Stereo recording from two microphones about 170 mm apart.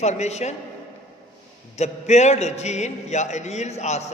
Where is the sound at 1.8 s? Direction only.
40° left (ahead or behind).